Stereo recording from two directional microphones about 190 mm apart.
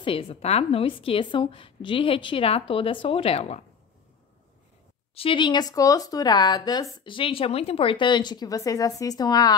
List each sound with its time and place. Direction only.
0.0 s speech: 30° left (ahead or behind)
5.1 s speech: 30° left (ahead or behind)